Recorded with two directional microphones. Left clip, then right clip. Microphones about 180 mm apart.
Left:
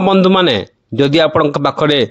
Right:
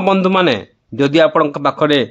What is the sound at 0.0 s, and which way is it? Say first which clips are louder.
A man's voice: left 2 dB; 30° left (ahead or behind).